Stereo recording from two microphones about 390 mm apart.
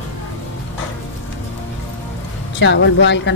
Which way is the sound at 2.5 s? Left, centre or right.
Left.